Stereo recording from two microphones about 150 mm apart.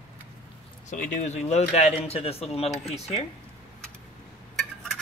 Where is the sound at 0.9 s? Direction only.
50° left (ahead or behind).